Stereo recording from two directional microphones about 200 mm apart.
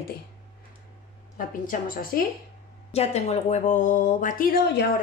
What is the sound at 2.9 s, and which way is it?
Speech, 30° left (ahead or behind).